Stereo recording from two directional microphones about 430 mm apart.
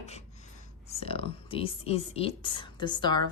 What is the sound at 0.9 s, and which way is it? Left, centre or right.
Speech, centre.